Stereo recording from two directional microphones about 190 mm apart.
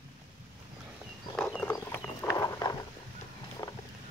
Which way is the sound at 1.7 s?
15° left (ahead or behind).